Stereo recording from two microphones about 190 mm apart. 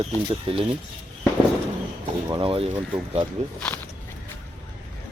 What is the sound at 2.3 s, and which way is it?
Speech, 25° right (ahead or behind).